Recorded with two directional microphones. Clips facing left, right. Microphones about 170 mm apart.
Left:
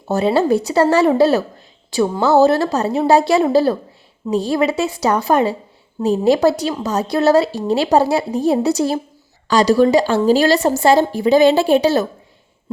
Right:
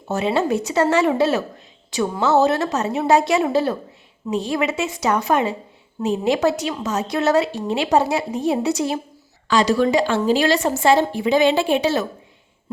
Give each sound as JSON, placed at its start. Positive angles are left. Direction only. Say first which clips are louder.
{"t": 0.1, "sound": "a woman's voice", "louder": "left 5 dB", "side_deg": 35}